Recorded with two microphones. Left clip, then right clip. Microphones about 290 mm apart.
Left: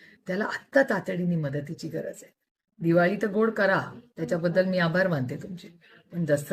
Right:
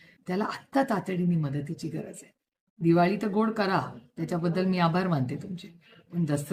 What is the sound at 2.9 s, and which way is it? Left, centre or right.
Speech, centre.